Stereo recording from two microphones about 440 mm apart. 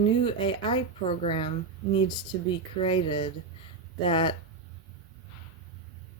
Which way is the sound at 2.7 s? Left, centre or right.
Centre.